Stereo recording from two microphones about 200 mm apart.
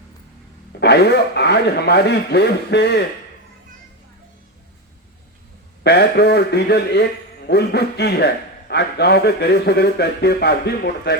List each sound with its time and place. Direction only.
0.8 s a man's voice: 55° left (ahead or behind)
5.8 s a man's voice: 55° left (ahead or behind)